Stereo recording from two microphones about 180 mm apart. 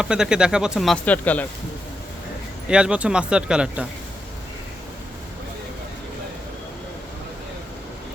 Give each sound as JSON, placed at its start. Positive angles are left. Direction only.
{"t": 0.0, "sound": "speech", "side_deg": -5}
{"t": 2.6, "sound": "speech", "side_deg": -5}